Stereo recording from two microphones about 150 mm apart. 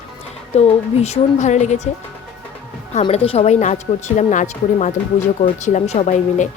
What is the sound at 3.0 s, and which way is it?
A woman's voice, 40° left (ahead or behind).